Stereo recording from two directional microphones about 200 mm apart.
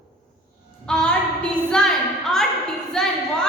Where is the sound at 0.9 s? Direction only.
5° left (ahead or behind).